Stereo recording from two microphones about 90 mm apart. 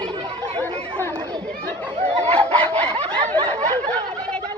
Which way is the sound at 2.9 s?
85° right.